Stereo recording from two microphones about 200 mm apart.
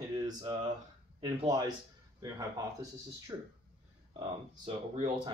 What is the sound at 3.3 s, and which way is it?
Speech, 15° right (ahead or behind).